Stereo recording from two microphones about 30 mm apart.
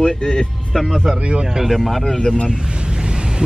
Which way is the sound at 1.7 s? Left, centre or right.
Centre.